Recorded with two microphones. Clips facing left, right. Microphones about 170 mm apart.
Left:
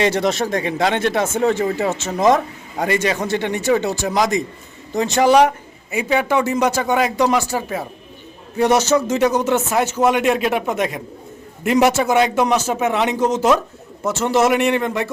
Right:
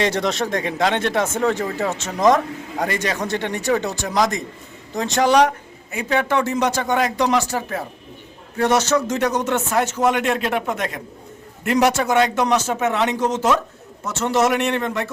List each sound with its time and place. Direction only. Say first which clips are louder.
0.0 s a man's voice: left 3 dB; 10° left (ahead or behind)